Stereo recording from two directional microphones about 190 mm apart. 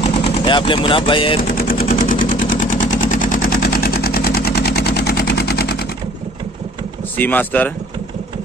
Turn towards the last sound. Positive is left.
turn(degrees=10)  # may be behind; listen again after turning